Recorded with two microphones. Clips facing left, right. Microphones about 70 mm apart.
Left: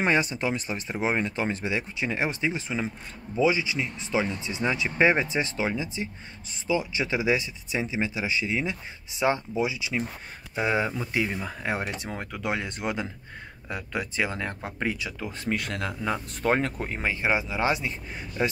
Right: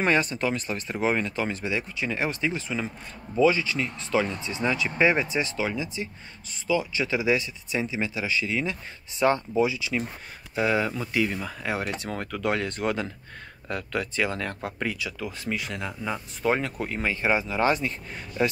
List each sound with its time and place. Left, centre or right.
0.0 s speech: centre
11.8 s speech: centre; by 15.5 s left
15.5 s speech: left
16.7 s speech: left